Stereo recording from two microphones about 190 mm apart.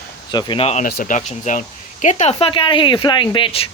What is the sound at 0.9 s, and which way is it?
Speech, 50° left (ahead or behind).